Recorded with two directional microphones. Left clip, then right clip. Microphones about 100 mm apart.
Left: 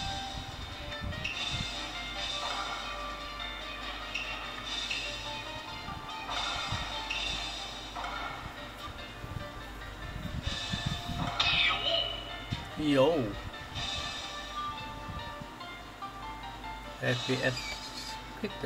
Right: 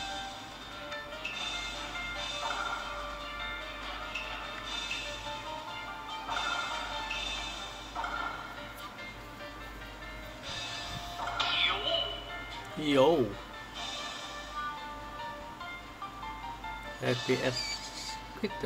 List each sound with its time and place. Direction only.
1.8 s music: 35° right (ahead or behind)
6.2 s music: 40° right (ahead or behind)
8.0 s a sound: 40° right (ahead or behind)
11.1 s music: 40° right (ahead or behind)
12.8 s speech: 45° right (ahead or behind)
17.0 s speech: 50° right (ahead or behind)